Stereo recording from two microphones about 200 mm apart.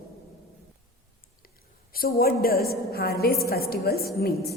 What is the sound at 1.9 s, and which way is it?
A woman's voice, 50° left (ahead or behind).